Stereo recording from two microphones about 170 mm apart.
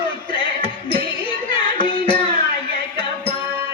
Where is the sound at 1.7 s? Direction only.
30° left (ahead or behind).